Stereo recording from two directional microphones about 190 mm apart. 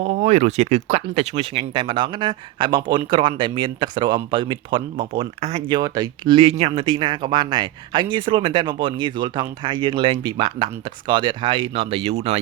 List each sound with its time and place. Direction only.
0.0 s speech: 30° right (ahead or behind)